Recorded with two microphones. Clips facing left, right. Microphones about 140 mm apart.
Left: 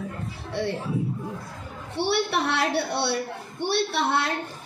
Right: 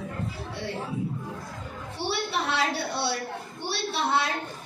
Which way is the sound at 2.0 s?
65° left (ahead or behind).